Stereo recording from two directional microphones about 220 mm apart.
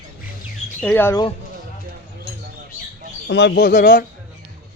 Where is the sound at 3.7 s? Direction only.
35° left (ahead or behind).